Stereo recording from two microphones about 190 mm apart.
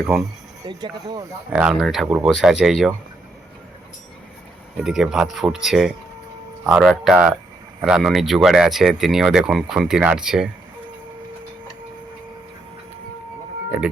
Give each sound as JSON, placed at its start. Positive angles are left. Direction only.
{"t": 0.0, "sound": "speech", "side_deg": 0}
{"t": 0.7, "sound": "speech", "side_deg": -20}
{"t": 1.5, "sound": "speech", "side_deg": -5}
{"t": 4.8, "sound": "speech", "side_deg": 0}